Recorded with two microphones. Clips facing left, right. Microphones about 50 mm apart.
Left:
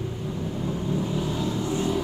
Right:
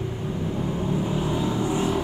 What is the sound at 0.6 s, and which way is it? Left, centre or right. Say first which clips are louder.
Vehicle: right 1 dB; right.